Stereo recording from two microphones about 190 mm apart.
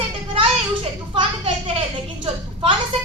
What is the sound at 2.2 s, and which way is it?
Speech, 30° right (ahead or behind).